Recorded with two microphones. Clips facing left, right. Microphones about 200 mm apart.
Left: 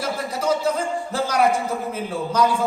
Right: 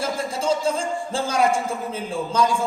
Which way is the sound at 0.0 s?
25° right (ahead or behind).